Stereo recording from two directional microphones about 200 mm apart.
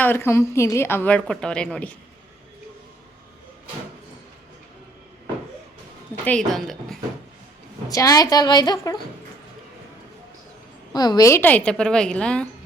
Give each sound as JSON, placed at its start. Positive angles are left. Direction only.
{"t": 0.0, "sound": "a woman's voice", "side_deg": 10}
{"t": 6.2, "sound": "a woman's voice", "side_deg": 5}
{"t": 7.9, "sound": "a woman's voice", "side_deg": 15}
{"t": 10.9, "sound": "a woman's voice", "side_deg": 20}